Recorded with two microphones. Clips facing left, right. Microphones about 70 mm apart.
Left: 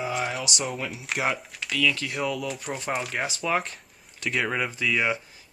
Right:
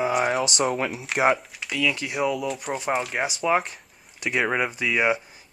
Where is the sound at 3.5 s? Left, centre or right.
Centre.